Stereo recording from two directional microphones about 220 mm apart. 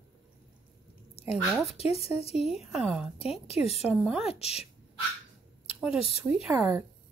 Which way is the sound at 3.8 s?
Centre (ahead or behind).